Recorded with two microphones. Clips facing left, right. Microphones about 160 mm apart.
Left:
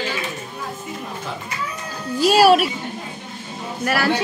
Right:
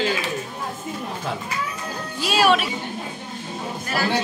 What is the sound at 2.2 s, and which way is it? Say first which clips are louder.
Speech: left 6 dB; 40° left (ahead or behind).